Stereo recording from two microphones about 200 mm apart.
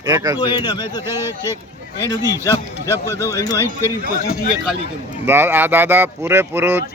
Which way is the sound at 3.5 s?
15° right (ahead or behind).